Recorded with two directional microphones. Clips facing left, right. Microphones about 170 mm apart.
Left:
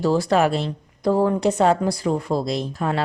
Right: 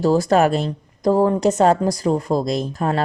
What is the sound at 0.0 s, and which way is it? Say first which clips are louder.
A woman's voice: right 3 dB; 45° right (ahead or behind).